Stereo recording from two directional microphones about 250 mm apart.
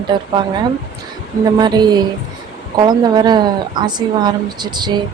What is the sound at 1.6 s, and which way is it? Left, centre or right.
A woman's voice, centre.